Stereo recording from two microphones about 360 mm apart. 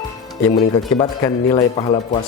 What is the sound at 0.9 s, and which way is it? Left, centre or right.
A man's voice, centre.